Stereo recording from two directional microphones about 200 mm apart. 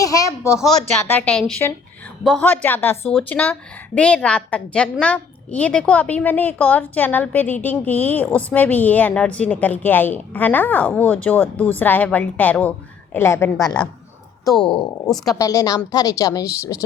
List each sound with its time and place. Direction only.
0.0 s speech: 15° left (ahead or behind)
1.1 s a woman's voice: 5° left (ahead or behind)
15.2 s a woman's voice: 15° left (ahead or behind)